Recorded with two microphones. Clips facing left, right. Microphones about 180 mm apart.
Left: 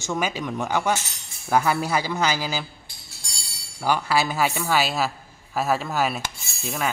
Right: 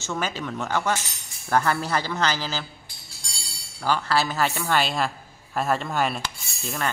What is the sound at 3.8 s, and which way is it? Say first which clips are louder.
A woman's voice: left 1 dB; 10° left (ahead or behind).